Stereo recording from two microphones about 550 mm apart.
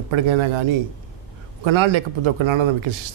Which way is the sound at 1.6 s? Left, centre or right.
Right.